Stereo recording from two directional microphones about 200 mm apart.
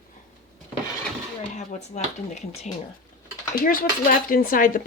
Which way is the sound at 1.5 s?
35° left (ahead or behind).